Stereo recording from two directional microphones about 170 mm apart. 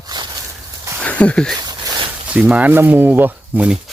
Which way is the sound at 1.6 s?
25° right (ahead or behind).